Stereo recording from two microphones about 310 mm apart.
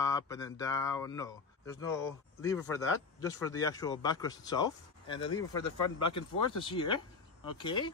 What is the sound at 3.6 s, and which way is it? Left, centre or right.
Speech, centre.